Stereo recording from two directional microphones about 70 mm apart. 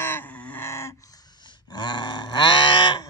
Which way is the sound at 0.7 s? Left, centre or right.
Left.